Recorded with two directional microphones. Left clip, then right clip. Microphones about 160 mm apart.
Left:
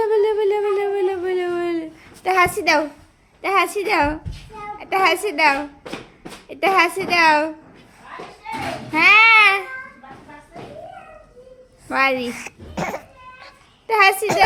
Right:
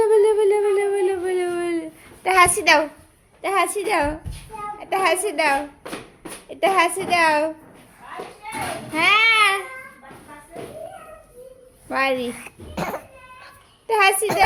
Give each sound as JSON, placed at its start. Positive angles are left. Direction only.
{"t": 0.0, "sound": "a sound", "side_deg": -5}
{"t": 3.4, "sound": "a woman's voice", "side_deg": 5}
{"t": 8.9, "sound": "babbling", "side_deg": 10}
{"t": 11.9, "sound": "a woman's voice", "side_deg": 5}
{"t": 12.3, "sound": "a child's voice", "side_deg": 25}
{"t": 12.7, "sound": "cough", "side_deg": 5}
{"t": 13.8, "sound": "a child's voice", "side_deg": 5}